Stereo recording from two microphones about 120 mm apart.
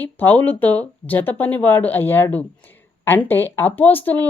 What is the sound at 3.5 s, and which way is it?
Speech, 15° left (ahead or behind).